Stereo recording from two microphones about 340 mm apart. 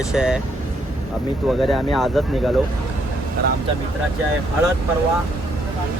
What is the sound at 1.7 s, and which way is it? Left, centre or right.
Speech, centre.